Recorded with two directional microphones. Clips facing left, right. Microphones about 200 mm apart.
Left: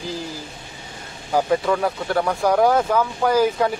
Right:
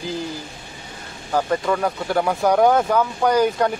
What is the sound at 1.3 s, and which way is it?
Speech, 5° left (ahead or behind).